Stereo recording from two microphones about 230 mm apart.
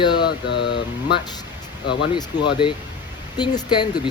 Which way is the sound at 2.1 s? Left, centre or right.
Centre.